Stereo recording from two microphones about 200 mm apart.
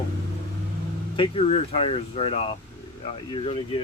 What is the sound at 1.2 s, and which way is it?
Speech, 30° left (ahead or behind).